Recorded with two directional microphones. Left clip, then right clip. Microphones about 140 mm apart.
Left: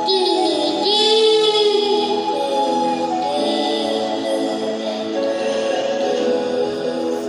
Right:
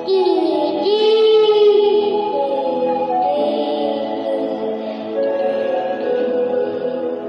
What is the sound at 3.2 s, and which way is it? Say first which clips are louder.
Music: right 2 dB; 10° right (ahead or behind).